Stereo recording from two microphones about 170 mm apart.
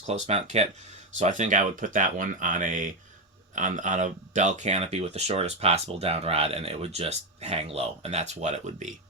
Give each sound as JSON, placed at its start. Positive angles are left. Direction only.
{"t": 0.1, "sound": "speech", "side_deg": -40}